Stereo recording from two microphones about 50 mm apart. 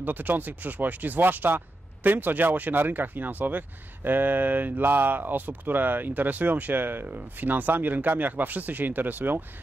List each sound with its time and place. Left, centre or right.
0.0 s speech: right